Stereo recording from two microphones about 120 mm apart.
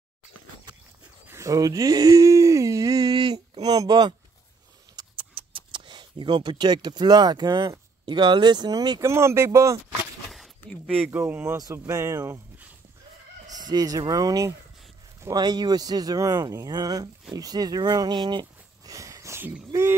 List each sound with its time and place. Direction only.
1.2 s speech: 25° right (ahead or behind)
9.0 s speech: 25° right (ahead or behind)
10.3 s a sound: 5° left (ahead or behind)
11.0 s speech: 15° right (ahead or behind)
11.5 s speech: 30° right (ahead or behind)
13.5 s fowl: 35° right (ahead or behind)
15.2 s speech: 35° right (ahead or behind)